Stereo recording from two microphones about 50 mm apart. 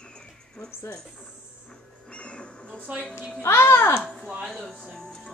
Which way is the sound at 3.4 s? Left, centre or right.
Left.